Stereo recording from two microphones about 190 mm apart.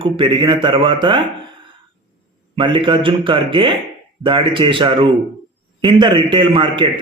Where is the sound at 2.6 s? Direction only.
25° right (ahead or behind).